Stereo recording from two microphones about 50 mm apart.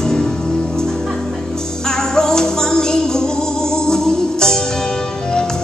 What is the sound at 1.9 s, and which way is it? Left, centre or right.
Music, centre.